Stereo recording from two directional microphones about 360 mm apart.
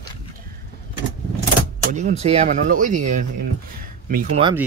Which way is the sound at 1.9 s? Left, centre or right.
Centre.